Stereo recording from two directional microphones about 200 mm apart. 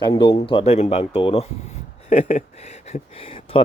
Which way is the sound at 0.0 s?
25° left (ahead or behind).